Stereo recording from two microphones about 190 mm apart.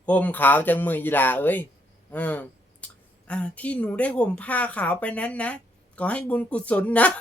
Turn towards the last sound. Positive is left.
turn(degrees=5)  # may be behind; listen again after turning